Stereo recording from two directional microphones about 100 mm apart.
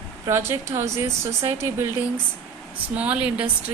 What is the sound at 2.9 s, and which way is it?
Speech, 15° right (ahead or behind).